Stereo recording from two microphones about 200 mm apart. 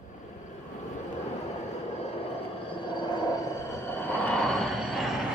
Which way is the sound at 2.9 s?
20° left (ahead or behind).